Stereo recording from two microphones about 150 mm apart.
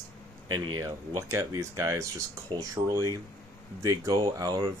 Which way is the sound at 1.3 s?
20° right (ahead or behind).